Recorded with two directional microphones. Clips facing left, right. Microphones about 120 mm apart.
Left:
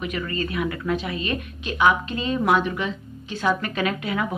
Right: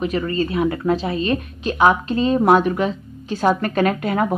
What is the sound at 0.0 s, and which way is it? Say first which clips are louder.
A woman's voice: right 7 dB; 35° right (ahead or behind).